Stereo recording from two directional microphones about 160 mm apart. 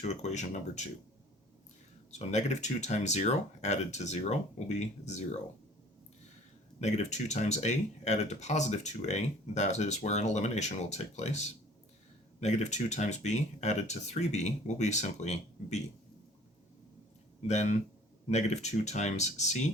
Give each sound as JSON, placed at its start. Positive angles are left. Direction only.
{"t": 0.0, "sound": "speech", "side_deg": 45}
{"t": 2.0, "sound": "speech", "side_deg": 45}
{"t": 6.7, "sound": "speech", "side_deg": 45}
{"t": 17.4, "sound": "speech", "side_deg": 45}